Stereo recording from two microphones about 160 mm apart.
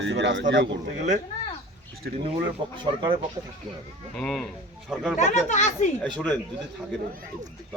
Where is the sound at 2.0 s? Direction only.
90° right.